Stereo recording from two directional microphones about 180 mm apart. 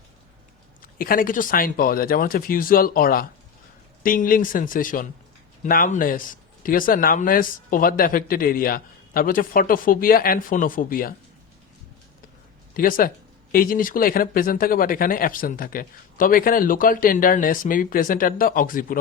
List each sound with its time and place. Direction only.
0.8 s speech: 50° left (ahead or behind)
12.7 s speech: 50° left (ahead or behind)